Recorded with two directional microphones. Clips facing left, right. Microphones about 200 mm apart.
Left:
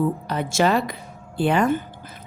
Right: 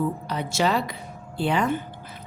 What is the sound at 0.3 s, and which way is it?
A woman's voice, 50° left (ahead or behind).